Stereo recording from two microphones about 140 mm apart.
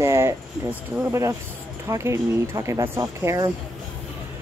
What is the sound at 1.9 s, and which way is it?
Speech, 20° right (ahead or behind).